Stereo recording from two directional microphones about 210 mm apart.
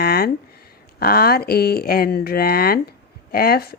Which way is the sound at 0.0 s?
45° left (ahead or behind).